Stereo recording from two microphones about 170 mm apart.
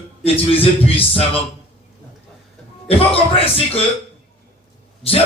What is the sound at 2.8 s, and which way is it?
Speech, 35° left (ahead or behind).